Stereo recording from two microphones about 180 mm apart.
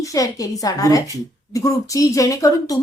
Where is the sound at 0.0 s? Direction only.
20° left (ahead or behind).